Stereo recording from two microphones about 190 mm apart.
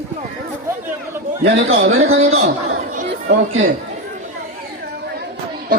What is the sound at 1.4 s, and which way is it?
Speech, 90° right.